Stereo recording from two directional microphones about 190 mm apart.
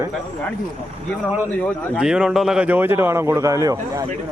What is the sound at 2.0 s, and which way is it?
Speech, 5° right (ahead or behind).